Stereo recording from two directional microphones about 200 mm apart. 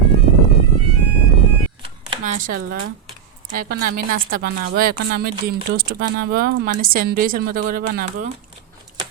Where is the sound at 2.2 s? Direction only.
40° right (ahead or behind).